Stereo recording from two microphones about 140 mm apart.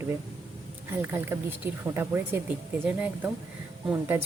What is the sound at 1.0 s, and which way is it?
Speech, 15° right (ahead or behind).